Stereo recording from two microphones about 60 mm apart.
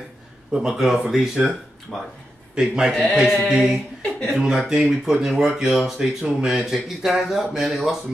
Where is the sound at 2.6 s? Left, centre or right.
Centre.